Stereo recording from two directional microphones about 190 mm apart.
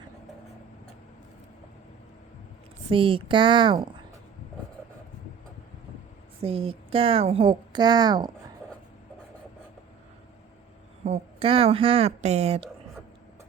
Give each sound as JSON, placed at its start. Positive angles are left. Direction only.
{"t": 2.9, "sound": "a woman's voice", "side_deg": -25}
{"t": 6.4, "sound": "a woman's voice", "side_deg": -30}
{"t": 11.0, "sound": "speech", "side_deg": -30}